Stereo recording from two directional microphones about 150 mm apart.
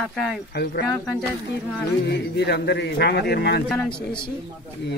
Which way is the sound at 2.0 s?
90° left.